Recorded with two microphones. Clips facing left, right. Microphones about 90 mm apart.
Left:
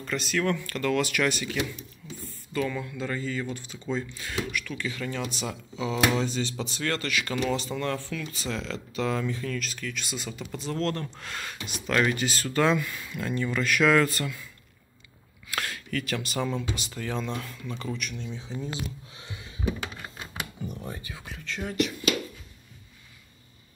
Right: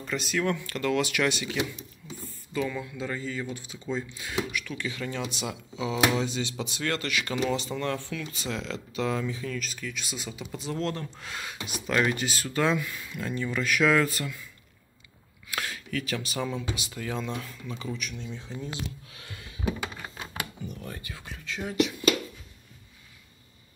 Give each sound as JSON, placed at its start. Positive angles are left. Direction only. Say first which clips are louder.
{"t": 0.0, "sound": "speech", "louder": "left 1 dB", "side_deg": -10}
{"t": 6.8, "sound": "speech", "louder": "left 1 dB", "side_deg": -25}
{"t": 15.5, "sound": "speech", "louder": "left 1 dB", "side_deg": -5}
{"t": 19.1, "sound": "a sound", "louder": "left 2 dB", "side_deg": 25}
{"t": 21.5, "sound": "speech", "louder": "even", "side_deg": -5}